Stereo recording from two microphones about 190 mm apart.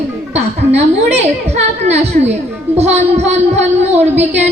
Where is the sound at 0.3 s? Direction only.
35° right (ahead or behind).